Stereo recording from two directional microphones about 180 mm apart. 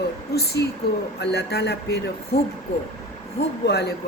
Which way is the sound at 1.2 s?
65° left (ahead or behind).